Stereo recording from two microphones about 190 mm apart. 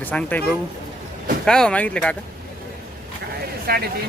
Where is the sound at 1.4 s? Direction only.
5° left (ahead or behind).